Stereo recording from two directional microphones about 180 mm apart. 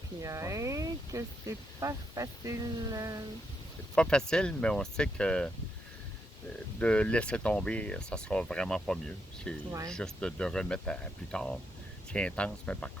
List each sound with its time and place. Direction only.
0.2 s speech: 15° right (ahead or behind)
3.9 s speech: 5° left (ahead or behind)
6.7 s speech: 5° left (ahead or behind)